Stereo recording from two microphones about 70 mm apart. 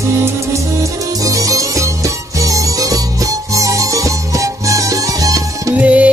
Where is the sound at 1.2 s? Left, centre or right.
Right.